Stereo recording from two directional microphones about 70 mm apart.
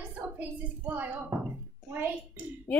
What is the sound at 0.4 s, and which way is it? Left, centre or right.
A child's voice, right.